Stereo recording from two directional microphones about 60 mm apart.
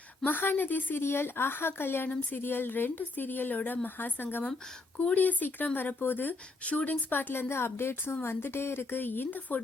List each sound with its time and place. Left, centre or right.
0.3 s a woman's voice: left
4.9 s a woman's voice: left
6.7 s speech: left
7.1 s a woman's voice: left